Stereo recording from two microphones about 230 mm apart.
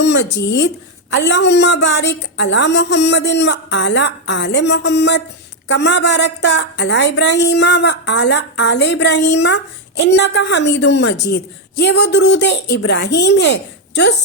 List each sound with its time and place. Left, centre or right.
0.0 s a woman's voice: left